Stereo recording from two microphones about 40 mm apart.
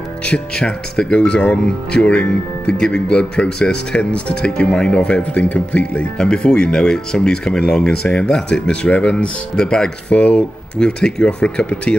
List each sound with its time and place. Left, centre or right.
0.3 s speech: left
8.8 s speech: left
9.2 s speech: left